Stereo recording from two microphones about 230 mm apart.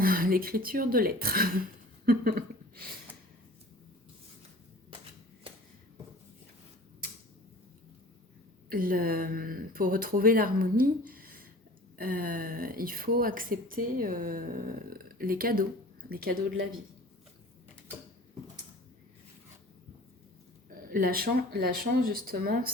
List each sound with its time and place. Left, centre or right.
0.0 s a woman's voice: right
8.7 s a woman's voice: right
20.7 s a woman's voice: right